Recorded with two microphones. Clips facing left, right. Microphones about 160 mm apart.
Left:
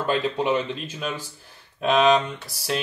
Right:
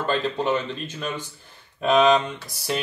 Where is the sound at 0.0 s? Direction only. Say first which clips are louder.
Left 1 dB; 10° left (ahead or behind).